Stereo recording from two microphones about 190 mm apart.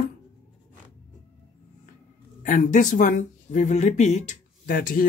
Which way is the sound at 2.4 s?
40° left (ahead or behind).